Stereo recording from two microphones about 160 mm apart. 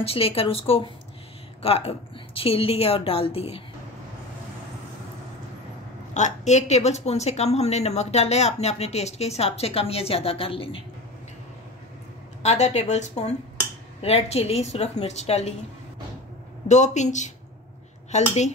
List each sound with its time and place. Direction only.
0.0 s a woman's voice: 35° left (ahead or behind)
6.1 s a woman's voice: 45° left (ahead or behind)
12.4 s a woman's voice: 45° left (ahead or behind)
16.6 s a woman's voice: 45° left (ahead or behind)